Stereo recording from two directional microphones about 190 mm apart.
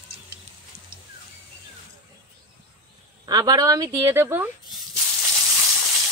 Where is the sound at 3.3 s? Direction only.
20° right (ahead or behind).